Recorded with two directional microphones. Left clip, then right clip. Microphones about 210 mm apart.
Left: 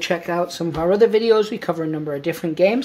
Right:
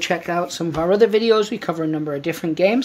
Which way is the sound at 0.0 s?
25° right (ahead or behind).